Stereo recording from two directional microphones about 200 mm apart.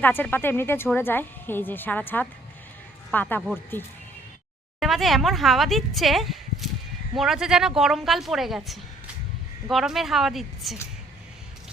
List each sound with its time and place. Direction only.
0.0 s speech: 10° left (ahead or behind)
4.8 s speech: centre (ahead or behind)